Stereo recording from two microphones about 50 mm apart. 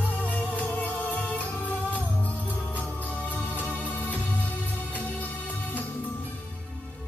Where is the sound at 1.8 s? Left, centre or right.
Right.